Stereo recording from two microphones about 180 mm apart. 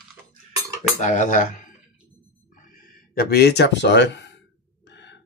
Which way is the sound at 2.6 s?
50° left (ahead or behind).